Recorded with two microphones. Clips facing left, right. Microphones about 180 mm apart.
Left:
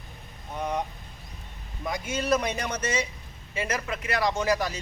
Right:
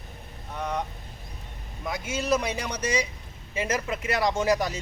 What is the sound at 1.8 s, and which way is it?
A man's voice, 5° right (ahead or behind).